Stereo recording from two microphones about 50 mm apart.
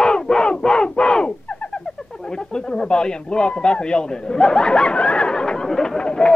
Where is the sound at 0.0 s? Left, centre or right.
Centre.